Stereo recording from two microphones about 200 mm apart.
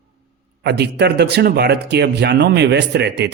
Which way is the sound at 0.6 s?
55° right (ahead or behind).